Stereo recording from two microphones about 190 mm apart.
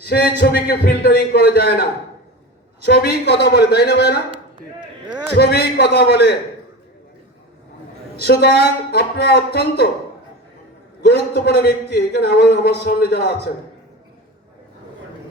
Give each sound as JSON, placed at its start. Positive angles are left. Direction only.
{"t": 0.0, "sound": "a man's voice", "side_deg": 55}
{"t": 5.3, "sound": "a man's voice", "side_deg": 55}
{"t": 8.2, "sound": "a man's voice", "side_deg": 60}
{"t": 11.0, "sound": "a man's voice", "side_deg": 60}